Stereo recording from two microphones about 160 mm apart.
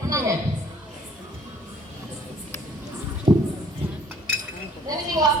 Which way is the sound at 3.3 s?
50° right (ahead or behind).